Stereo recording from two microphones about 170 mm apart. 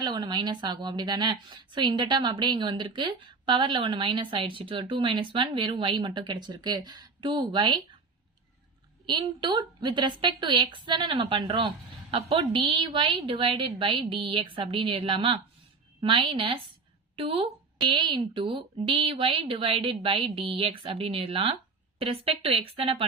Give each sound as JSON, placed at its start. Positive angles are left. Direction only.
{"t": 0.0, "sound": "a woman's voice", "side_deg": -25}
{"t": 9.0, "sound": "a woman's voice", "side_deg": -25}